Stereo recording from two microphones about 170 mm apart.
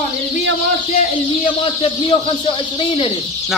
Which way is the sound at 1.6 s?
30° left (ahead or behind).